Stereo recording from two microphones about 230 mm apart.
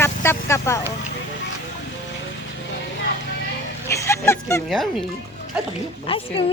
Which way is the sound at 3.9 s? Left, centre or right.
Centre.